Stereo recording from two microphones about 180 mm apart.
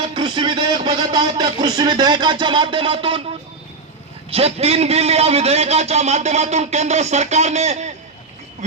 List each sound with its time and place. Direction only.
0.1 s speech: 25° right (ahead or behind)
4.3 s a man's voice: 35° right (ahead or behind)